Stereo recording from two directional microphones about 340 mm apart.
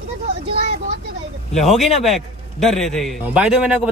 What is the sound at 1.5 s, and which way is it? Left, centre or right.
A man's voice, centre.